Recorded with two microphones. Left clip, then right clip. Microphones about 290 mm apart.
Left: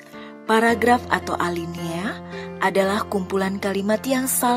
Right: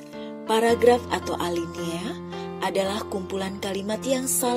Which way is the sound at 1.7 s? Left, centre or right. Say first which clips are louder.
Left 1 dB; left.